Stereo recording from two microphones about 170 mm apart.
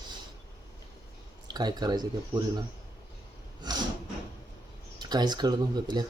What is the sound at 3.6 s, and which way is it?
Speech, 25° right (ahead or behind).